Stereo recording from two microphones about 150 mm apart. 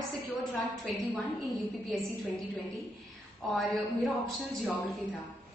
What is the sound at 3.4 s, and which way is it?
Speech, 5° left (ahead or behind).